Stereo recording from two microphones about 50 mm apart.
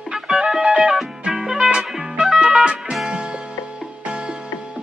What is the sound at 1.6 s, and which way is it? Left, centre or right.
Music, right.